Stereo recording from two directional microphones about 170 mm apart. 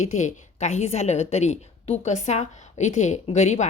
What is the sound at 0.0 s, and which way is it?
A woman's voice, 45° left (ahead or behind).